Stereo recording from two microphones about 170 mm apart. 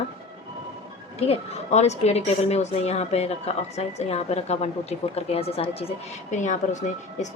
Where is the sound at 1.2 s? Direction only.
35° left (ahead or behind).